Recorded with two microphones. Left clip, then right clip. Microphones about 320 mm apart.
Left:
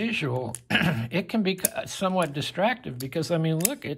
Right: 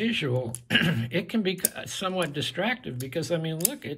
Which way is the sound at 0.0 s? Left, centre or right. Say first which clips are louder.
Even; centre.